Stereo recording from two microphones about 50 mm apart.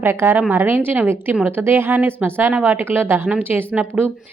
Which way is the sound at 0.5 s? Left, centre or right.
Right.